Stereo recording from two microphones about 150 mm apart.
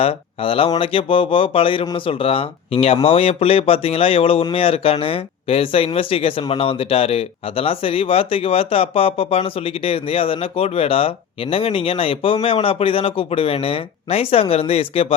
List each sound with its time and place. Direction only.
0.0 s speech: 40° left (ahead or behind)